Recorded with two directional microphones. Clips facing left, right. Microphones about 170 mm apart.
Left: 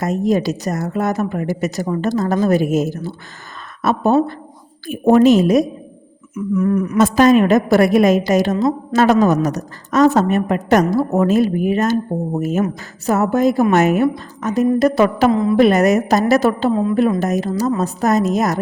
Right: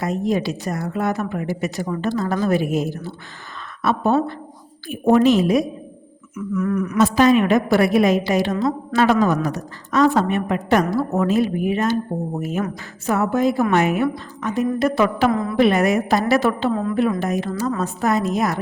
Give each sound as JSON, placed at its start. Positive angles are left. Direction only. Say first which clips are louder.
{"t": 0.0, "sound": "a woman's voice", "louder": "left 4 dB", "side_deg": 45}
{"t": 4.9, "sound": "a woman's voice", "louder": "left 4 dB", "side_deg": 45}
{"t": 6.3, "sound": "humming", "louder": "left 5 dB", "side_deg": 30}
{"t": 6.9, "sound": "a woman's voice", "louder": "left 3 dB", "side_deg": 45}
{"t": 15.3, "sound": "humming", "louder": "left 6 dB", "side_deg": 20}
{"t": 15.5, "sound": "a woman's voice", "louder": "left 3 dB", "side_deg": 40}